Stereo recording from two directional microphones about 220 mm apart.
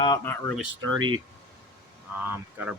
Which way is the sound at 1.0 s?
20° right (ahead or behind).